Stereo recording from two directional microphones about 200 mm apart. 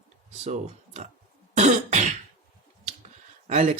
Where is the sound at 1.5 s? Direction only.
35° right (ahead or behind).